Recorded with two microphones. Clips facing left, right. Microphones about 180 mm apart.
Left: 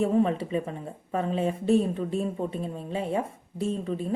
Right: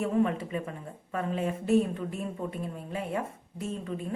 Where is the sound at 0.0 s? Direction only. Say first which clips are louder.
Left 3 dB; 30° left (ahead or behind).